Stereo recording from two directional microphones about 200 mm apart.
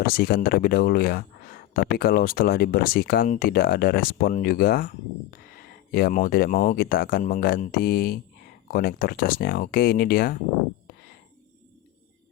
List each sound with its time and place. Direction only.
0.0 s speech: 50° left (ahead or behind)